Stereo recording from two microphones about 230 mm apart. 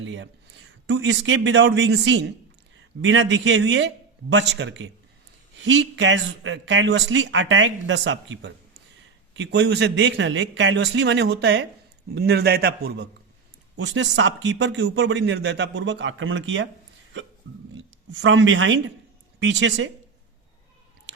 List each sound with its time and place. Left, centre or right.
0.0 s speech: right
17.7 s a woman's voice: right